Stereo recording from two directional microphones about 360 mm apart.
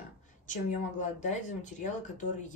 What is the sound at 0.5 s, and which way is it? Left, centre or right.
A woman's voice, centre.